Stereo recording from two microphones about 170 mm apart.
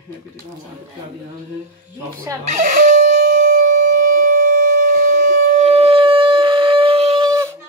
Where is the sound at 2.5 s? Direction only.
50° right (ahead or behind).